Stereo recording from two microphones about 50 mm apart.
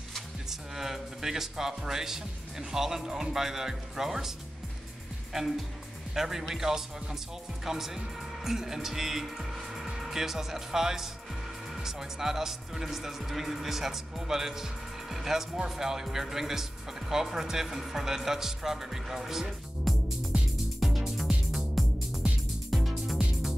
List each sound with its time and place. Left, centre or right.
0.5 s speech: centre
6.1 s speech: centre
20.8 s music: centre